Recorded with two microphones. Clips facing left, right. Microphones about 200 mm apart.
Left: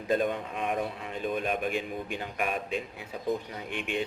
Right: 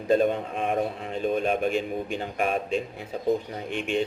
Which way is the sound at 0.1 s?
30° right (ahead or behind).